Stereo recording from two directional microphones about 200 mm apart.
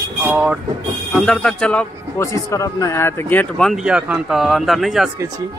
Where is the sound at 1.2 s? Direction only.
5° left (ahead or behind).